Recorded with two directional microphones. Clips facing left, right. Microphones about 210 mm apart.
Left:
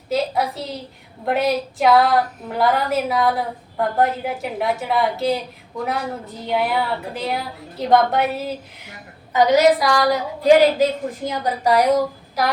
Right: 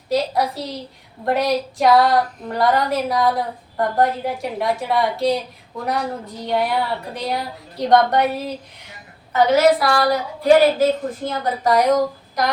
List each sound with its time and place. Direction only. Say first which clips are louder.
0.1 s a woman's voice: right 1 dB; centre (ahead or behind)
6.4 s a woman's voice: even; 5° left (ahead or behind)
9.3 s a woman's voice: even; 15° left (ahead or behind)